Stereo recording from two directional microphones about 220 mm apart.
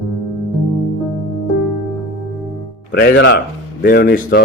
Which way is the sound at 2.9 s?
45° left (ahead or behind).